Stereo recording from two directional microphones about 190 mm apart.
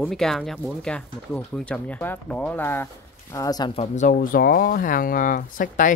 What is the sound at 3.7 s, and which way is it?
Speech, 35° left (ahead or behind).